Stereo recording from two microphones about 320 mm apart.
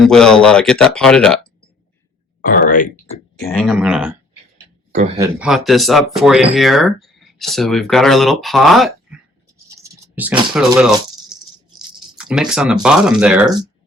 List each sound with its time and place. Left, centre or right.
0.0 s speech: centre
2.4 s speech: left
3.1 s speech: centre
3.6 s speech: centre
4.5 s a sound: centre
5.4 s speech: centre
9.6 s a sound: centre
12.1 s speech: centre